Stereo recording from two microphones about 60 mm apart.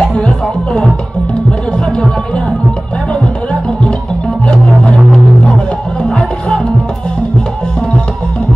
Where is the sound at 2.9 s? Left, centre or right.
Centre.